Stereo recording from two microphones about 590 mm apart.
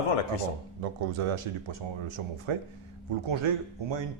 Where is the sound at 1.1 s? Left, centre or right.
Right.